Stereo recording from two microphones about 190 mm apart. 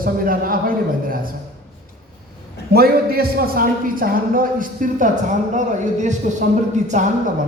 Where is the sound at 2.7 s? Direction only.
55° right (ahead or behind).